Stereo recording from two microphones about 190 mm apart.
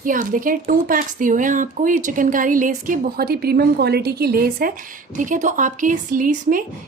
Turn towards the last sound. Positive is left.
turn(degrees=-45)  # may be behind; listen again after turning